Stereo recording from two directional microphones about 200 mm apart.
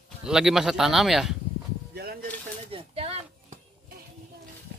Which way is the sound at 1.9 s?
50° right (ahead or behind).